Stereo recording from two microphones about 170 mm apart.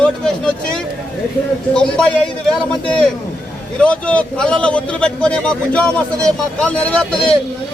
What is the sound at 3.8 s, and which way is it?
A man's voice, 5° left (ahead or behind).